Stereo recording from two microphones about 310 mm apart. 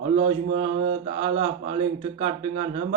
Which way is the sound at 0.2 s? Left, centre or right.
Centre.